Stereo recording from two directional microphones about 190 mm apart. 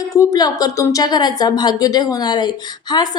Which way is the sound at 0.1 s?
20° left (ahead or behind).